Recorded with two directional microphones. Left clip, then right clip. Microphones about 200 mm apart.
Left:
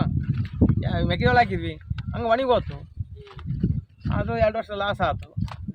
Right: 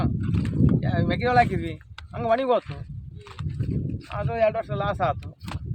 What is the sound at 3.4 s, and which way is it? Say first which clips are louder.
Horse: right 1 dB; 40° right (ahead or behind).